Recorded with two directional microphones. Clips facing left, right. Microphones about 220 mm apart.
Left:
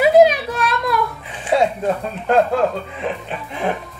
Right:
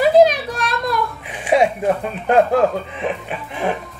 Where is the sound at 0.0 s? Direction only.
5° left (ahead or behind).